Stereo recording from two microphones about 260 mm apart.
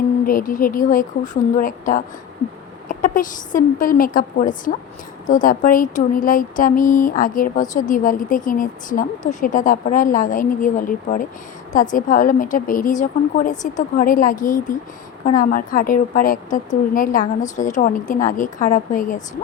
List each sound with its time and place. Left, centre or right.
0.3 s speech: left